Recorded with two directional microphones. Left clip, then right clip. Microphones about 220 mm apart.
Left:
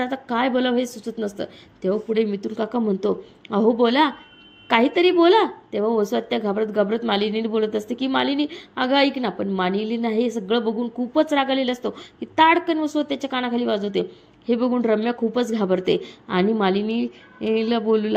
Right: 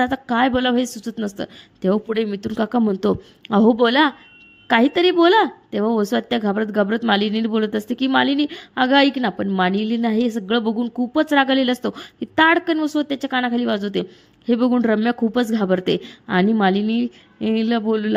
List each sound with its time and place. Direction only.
0.0 s a woman's voice: 45° right (ahead or behind)